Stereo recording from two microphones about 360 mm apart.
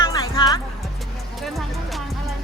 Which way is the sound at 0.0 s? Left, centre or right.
Centre.